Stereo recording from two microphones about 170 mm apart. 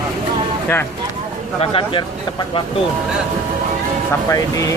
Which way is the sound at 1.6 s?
30° left (ahead or behind).